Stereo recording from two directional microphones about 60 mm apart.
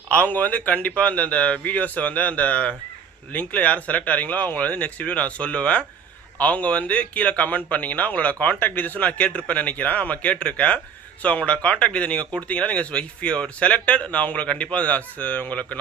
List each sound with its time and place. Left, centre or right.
0.1 s speech: left